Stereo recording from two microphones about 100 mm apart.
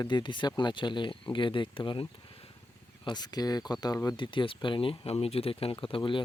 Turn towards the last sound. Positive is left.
turn(degrees=55)  # may be behind; listen again after turning